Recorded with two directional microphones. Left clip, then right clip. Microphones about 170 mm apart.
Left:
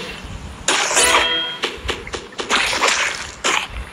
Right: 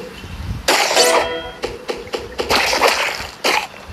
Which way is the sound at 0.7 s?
10° right (ahead or behind).